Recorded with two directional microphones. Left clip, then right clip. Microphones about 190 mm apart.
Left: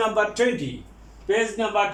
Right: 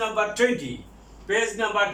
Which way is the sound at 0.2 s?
30° left (ahead or behind).